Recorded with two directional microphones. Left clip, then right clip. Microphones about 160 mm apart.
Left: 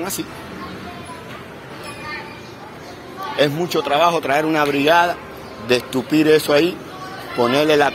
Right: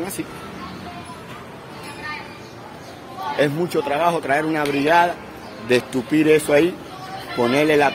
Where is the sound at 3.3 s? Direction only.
20° right (ahead or behind).